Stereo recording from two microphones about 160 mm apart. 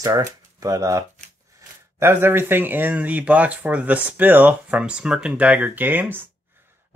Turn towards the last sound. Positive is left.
turn(degrees=-10)  # may be behind; listen again after turning